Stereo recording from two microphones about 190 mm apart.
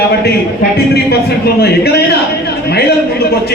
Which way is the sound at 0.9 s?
55° left (ahead or behind).